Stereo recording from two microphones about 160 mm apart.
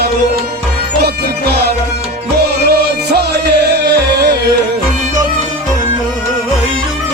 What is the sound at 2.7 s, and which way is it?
Music, 85° right.